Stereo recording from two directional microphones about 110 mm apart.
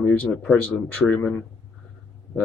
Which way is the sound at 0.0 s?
15° left (ahead or behind).